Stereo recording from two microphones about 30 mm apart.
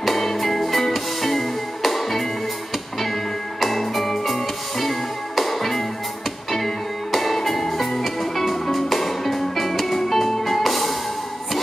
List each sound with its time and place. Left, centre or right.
0.0 s music: centre
3.6 s music: centre